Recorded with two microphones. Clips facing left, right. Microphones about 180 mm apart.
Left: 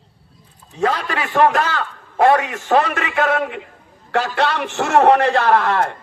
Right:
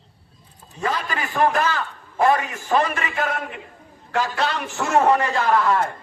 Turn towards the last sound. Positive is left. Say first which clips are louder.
# left 3 dB
turn(degrees=70)  # may be behind; listen again after turning